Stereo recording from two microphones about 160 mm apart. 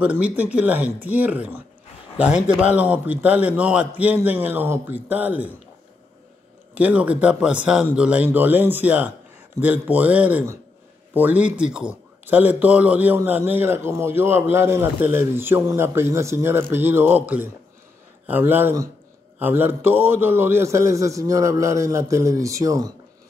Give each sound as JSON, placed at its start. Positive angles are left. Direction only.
{"t": 0.0, "sound": "speech", "side_deg": -10}
{"t": 2.6, "sound": "speech", "side_deg": -10}
{"t": 6.7, "sound": "a man's voice", "side_deg": -10}